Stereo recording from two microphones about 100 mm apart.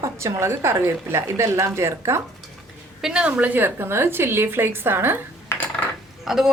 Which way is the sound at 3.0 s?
5° right (ahead or behind).